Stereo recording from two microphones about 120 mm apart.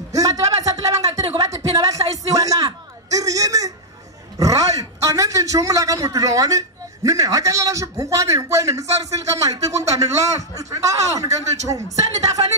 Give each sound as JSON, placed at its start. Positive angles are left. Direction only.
{"t": 0.1, "sound": "a sound", "side_deg": -30}
{"t": 4.4, "sound": "a man's voice", "side_deg": -30}
{"t": 11.2, "sound": "speech", "side_deg": -70}
{"t": 11.7, "sound": "a man's voice", "side_deg": -30}